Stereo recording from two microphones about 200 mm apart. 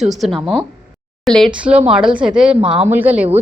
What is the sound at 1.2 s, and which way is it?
A woman's voice, centre (ahead or behind).